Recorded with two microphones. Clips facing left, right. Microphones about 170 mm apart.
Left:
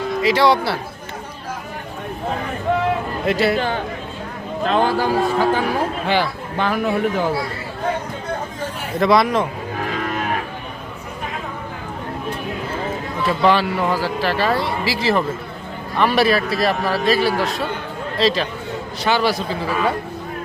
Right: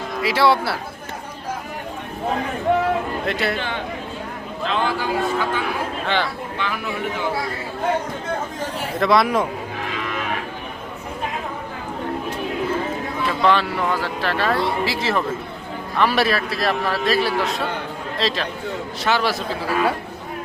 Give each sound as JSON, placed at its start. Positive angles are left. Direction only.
{"t": 0.2, "sound": "speech", "side_deg": -5}
{"t": 3.2, "sound": "speech", "side_deg": 0}
{"t": 4.6, "sound": "a man's voice", "side_deg": 45}
{"t": 9.0, "sound": "speech", "side_deg": 0}
{"t": 10.0, "sound": "cattle", "side_deg": 45}
{"t": 13.4, "sound": "speech", "side_deg": 5}